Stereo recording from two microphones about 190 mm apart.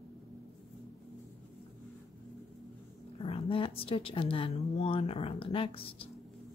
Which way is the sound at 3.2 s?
30° left (ahead or behind).